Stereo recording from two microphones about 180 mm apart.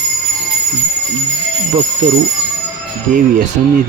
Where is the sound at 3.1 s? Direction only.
45° right (ahead or behind).